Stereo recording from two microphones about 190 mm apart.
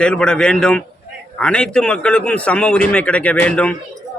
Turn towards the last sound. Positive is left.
turn(degrees=5)  # may be behind; listen again after turning